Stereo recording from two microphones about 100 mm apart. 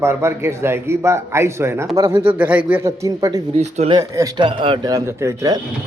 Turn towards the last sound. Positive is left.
turn(degrees=-35)  # may be behind; listen again after turning